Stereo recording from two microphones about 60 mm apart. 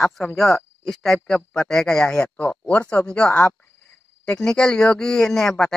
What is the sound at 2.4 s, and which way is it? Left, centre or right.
Speech, left.